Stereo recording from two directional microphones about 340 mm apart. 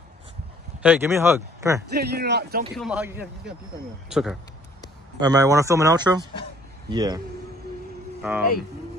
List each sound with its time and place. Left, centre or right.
0.7 s speech: centre
2.0 s speech: right
2.7 s speech: centre
8.2 s speech: centre